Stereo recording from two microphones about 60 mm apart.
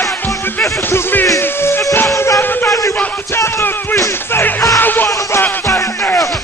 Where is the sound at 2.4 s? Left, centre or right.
Left.